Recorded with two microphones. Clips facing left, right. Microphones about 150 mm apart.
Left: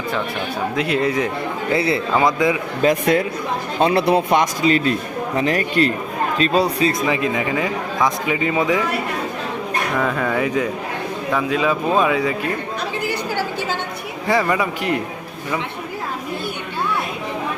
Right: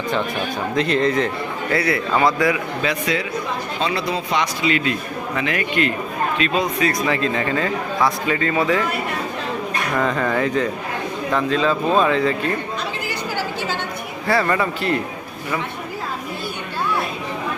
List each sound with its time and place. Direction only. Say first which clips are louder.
0.8 s a man's voice: right 2 dB; 10° left (ahead or behind)
1.7 s a man's voice: left 1 dB; 25° left (ahead or behind)
2.8 s speech: left 8 dB; 50° left (ahead or behind); by 6.9 s 35° left (ahead or behind)
7.0 s a man's voice: left 1 dB; 15° left (ahead or behind)
10.0 s a man's voice: right 1 dB; 5° left (ahead or behind)
14.3 s a man's voice: left 1 dB; 15° left (ahead or behind)